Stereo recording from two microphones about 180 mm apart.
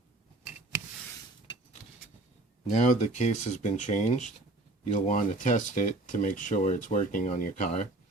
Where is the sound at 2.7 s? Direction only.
40° left (ahead or behind).